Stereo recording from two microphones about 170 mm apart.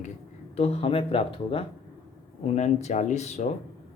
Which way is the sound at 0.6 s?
35° left (ahead or behind).